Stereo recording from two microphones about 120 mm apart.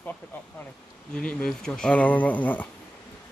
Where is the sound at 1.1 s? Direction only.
10° left (ahead or behind).